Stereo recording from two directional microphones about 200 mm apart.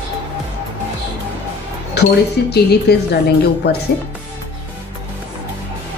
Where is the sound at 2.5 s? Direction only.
55° left (ahead or behind).